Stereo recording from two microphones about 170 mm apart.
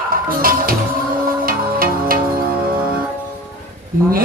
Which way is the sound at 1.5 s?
55° right (ahead or behind).